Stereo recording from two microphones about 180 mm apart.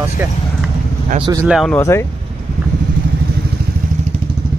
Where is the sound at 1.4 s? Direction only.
Centre (ahead or behind).